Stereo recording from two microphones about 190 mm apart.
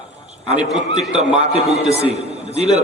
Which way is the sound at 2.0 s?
35° right (ahead or behind).